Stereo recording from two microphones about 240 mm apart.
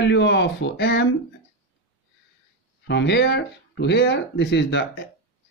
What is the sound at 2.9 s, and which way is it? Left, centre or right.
Speech, left.